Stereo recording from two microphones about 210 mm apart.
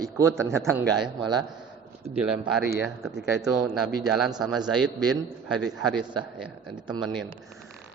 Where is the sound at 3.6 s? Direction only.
Centre (ahead or behind).